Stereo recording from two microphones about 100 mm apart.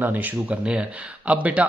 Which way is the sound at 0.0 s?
20° right (ahead or behind).